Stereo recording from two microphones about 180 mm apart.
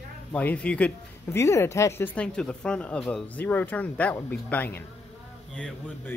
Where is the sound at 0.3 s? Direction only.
5° left (ahead or behind).